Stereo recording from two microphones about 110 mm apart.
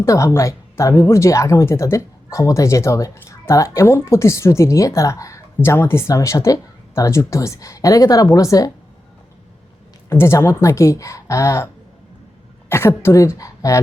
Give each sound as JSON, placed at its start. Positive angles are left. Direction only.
{"t": 0.0, "sound": "speech", "side_deg": 25}
{"t": 10.1, "sound": "a woman's voice", "side_deg": 25}